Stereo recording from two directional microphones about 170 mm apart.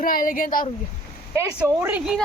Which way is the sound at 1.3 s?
15° right (ahead or behind).